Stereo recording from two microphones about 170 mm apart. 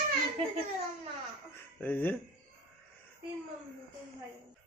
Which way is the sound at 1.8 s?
10° left (ahead or behind).